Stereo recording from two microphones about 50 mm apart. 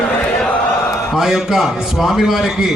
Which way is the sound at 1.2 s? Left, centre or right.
Centre.